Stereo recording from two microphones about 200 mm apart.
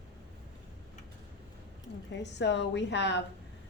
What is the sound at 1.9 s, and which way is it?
A woman's voice, 60° left (ahead or behind).